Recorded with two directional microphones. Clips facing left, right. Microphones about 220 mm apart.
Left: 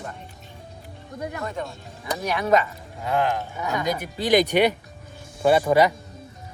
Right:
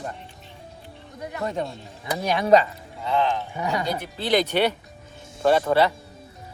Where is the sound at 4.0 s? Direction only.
10° left (ahead or behind).